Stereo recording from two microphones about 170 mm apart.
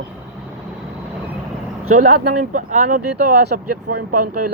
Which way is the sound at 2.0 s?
50° right (ahead or behind).